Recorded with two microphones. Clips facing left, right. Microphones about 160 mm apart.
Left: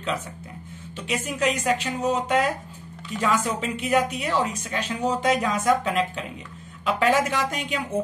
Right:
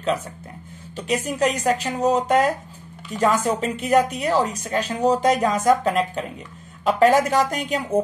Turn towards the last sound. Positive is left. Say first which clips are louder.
# right 5 dB
turn(degrees=-40)  # may be behind; listen again after turning